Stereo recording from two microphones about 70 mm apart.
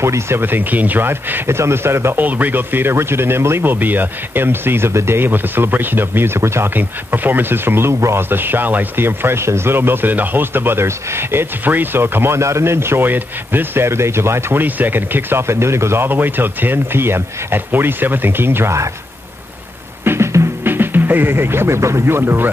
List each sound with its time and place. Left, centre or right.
0.0 s speech: right
2.1 s speech: right
20.1 s speech: right